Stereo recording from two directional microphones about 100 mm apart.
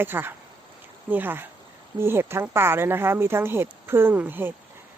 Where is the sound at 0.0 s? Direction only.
20° right (ahead or behind).